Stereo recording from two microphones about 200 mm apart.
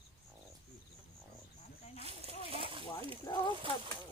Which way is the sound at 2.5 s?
25° right (ahead or behind).